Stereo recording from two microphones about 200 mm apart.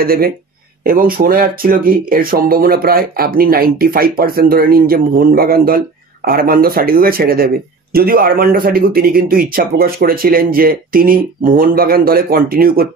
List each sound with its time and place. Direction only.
0.0 s speech: 50° right (ahead or behind)